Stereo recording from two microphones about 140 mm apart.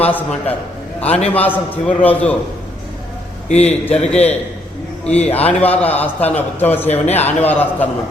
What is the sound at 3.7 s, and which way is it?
Speech, 10° left (ahead or behind).